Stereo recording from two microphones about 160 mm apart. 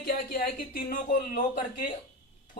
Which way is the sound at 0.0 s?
65° left (ahead or behind).